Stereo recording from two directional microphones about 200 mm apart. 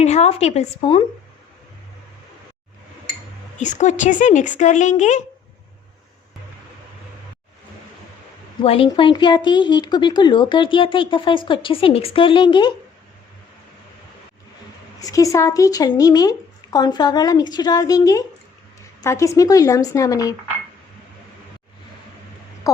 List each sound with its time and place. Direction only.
0.0 s speech: 35° left (ahead or behind)
3.6 s speech: 35° left (ahead or behind)
8.6 s a woman's voice: 30° left (ahead or behind)
15.0 s a woman's voice: 15° left (ahead or behind)
22.7 s speech: 15° left (ahead or behind)